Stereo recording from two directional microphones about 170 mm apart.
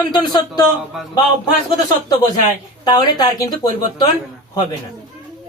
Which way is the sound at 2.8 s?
25° left (ahead or behind).